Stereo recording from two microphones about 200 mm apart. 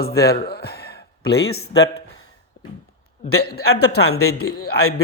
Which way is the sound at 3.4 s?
50° left (ahead or behind).